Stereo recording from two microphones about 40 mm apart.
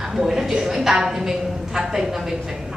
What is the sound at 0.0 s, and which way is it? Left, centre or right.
A woman's voice, centre.